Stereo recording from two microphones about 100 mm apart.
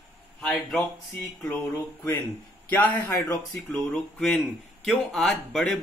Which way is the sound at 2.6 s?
15° left (ahead or behind).